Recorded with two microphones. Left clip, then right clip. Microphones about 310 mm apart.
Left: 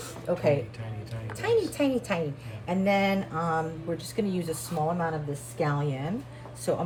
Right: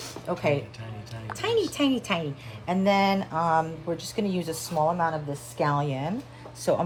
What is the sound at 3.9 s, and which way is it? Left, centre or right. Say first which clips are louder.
Speech: right 1 dB; centre.